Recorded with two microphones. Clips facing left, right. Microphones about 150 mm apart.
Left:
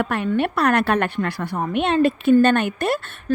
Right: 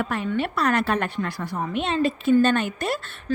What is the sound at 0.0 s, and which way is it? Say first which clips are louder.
Speech: left 4 dB; 65° left (ahead or behind).